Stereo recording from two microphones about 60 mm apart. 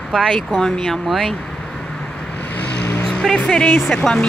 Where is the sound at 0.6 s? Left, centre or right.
Centre.